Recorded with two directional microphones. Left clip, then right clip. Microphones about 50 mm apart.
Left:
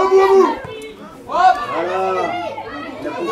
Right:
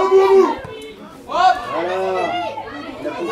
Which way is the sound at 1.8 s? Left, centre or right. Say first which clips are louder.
Left 1 dB; centre.